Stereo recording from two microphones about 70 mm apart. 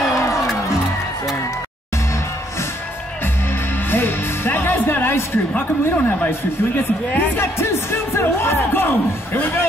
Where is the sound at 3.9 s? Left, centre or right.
Left.